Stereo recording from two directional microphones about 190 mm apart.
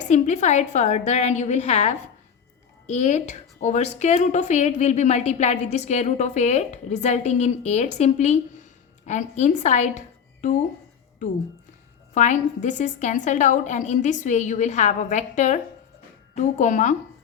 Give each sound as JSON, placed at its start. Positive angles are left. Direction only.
{"t": 0.1, "sound": "a woman's voice", "side_deg": 40}
{"t": 12.1, "sound": "a woman's voice", "side_deg": 40}